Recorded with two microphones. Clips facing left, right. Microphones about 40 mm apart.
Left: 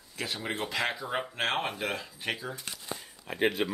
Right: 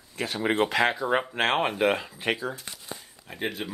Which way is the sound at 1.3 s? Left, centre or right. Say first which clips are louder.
Right 6 dB; right.